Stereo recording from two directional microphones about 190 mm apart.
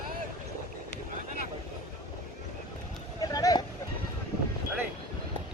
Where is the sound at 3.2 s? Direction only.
20° left (ahead or behind).